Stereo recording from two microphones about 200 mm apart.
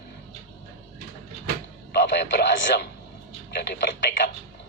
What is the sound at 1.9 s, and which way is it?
Speech, 55° left (ahead or behind).